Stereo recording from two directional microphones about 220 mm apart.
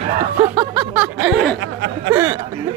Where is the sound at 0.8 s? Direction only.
5° right (ahead or behind).